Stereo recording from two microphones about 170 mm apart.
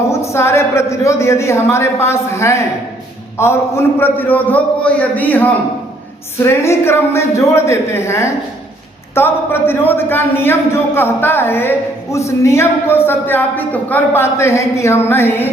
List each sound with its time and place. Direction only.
0.1 s a man's voice: 15° left (ahead or behind)